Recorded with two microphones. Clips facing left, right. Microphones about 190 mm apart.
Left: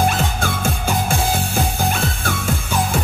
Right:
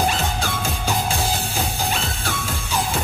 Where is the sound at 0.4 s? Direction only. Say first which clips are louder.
Left 3 dB; 55° left (ahead or behind).